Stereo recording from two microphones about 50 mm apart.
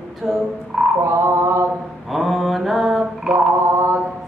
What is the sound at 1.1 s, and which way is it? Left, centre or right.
Mantra, right.